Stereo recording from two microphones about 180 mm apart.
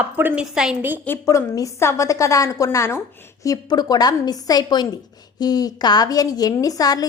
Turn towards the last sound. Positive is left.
turn(degrees=20)  # may be behind; listen again after turning